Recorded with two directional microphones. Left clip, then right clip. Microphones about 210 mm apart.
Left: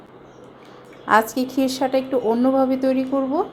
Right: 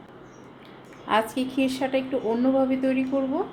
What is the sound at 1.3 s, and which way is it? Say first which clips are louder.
Speech: left 4 dB; 25° left (ahead or behind).